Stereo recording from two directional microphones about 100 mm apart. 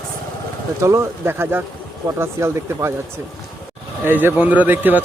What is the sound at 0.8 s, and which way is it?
Speech, 30° right (ahead or behind).